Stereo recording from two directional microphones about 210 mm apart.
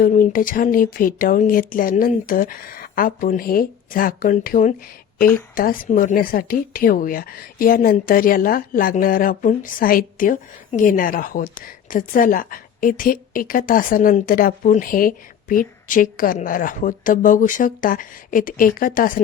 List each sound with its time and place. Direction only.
0.0 s a woman's voice: 40° left (ahead or behind)